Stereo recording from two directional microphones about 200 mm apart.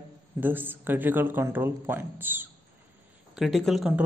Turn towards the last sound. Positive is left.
turn(degrees=0)  # may be behind; listen again after turning